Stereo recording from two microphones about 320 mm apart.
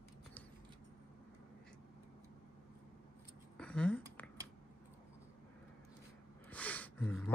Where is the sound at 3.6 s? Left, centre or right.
Centre.